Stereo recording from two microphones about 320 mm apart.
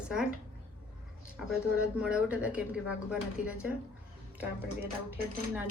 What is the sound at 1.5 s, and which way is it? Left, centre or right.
Speech, centre.